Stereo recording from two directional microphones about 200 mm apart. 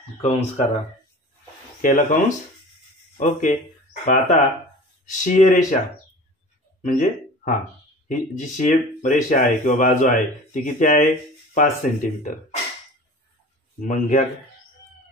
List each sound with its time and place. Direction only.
0.2 s speech: 30° left (ahead or behind)
1.8 s speech: 40° left (ahead or behind)
6.8 s a sound: 40° left (ahead or behind)
8.4 s speech: 40° left (ahead or behind)
13.7 s speech: 40° left (ahead or behind)